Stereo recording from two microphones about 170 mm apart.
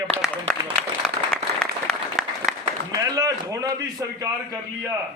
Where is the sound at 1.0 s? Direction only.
5° left (ahead or behind).